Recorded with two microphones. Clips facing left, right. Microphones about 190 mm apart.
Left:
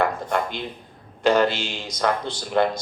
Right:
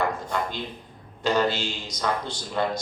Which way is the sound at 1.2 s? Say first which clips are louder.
Left 5 dB; 55° left (ahead or behind).